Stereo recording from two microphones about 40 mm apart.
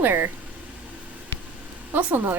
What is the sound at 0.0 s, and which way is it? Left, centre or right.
Speech, right.